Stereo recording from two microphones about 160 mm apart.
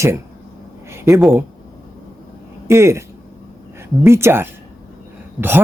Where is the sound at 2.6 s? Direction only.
15° right (ahead or behind).